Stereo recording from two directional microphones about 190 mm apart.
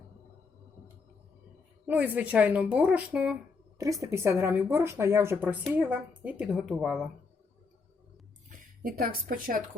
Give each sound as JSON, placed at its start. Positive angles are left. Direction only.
{"t": 1.9, "sound": "speech", "side_deg": -10}
{"t": 3.8, "sound": "speech", "side_deg": -15}
{"t": 8.4, "sound": "a woman's voice", "side_deg": -45}